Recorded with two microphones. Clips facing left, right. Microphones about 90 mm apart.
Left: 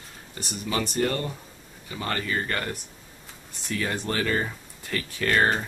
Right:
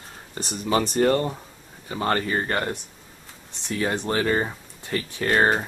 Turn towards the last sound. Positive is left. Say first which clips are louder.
# right 2 dB
turn(degrees=-30)  # may be behind; listen again after turning